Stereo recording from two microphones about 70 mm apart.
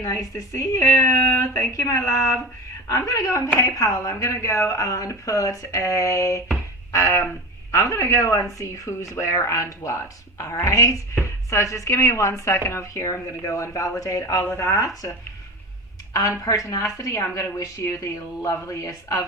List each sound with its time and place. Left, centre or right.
0.3 s a woman's voice: left
16.1 s a woman's voice: left